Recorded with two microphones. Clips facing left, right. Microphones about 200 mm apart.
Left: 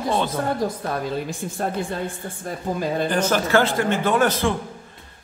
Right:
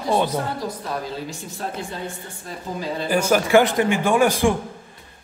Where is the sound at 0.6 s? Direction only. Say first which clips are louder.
Left 3 dB; 55° left (ahead or behind).